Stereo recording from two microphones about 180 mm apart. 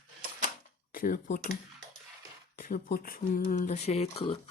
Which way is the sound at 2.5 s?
50° left (ahead or behind).